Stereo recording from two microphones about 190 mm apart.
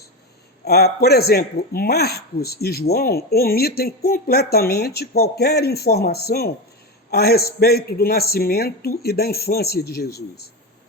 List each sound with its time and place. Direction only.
0.6 s a man's voice: 55° left (ahead or behind)